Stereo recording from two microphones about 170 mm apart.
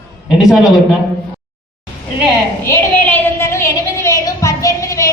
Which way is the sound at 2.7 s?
10° left (ahead or behind).